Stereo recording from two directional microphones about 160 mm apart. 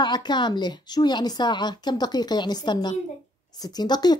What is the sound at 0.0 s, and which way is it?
A woman's voice, 25° left (ahead or behind).